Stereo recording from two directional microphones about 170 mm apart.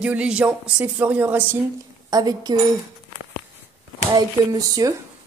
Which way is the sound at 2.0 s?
25° right (ahead or behind).